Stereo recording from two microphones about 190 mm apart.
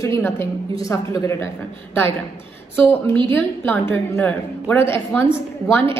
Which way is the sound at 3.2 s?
10° left (ahead or behind).